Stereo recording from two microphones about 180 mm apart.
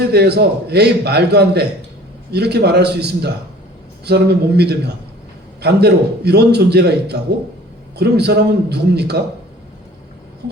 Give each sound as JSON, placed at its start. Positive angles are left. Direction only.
{"t": 0.0, "sound": "a man's voice", "side_deg": -65}